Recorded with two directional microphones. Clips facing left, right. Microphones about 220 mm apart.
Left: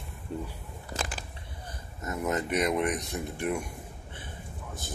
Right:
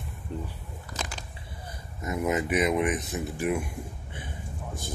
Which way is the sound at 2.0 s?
10° right (ahead or behind).